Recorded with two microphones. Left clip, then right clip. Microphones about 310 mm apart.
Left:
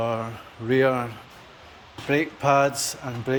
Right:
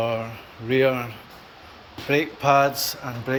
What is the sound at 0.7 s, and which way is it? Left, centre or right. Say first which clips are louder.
Speech: even; centre.